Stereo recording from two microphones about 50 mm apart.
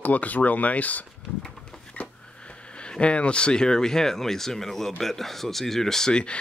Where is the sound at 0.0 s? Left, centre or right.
Left.